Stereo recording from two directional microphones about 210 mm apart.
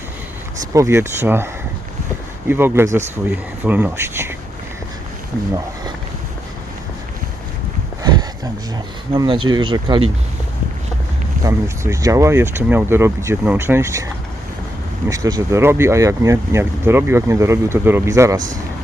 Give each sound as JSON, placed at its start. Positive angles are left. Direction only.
{"t": 0.7, "sound": "speech", "side_deg": -15}
{"t": 2.5, "sound": "speech", "side_deg": -10}
{"t": 9.1, "sound": "speech", "side_deg": -25}
{"t": 11.4, "sound": "speech", "side_deg": -15}
{"t": 15.1, "sound": "speech", "side_deg": -15}